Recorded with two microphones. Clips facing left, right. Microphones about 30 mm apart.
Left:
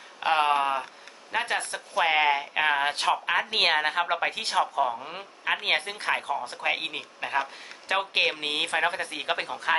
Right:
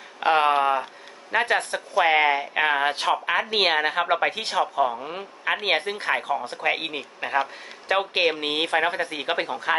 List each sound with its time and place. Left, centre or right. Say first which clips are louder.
0.2 s a man's voice: right 4 dB; centre
5.0 s speech: right 3 dB; centre